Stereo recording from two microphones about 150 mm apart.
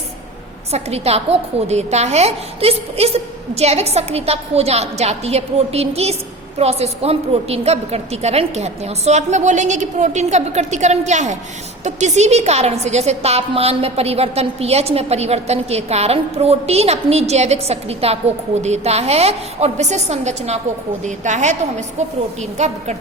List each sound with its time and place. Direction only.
0.7 s a woman's voice: 45° right (ahead or behind)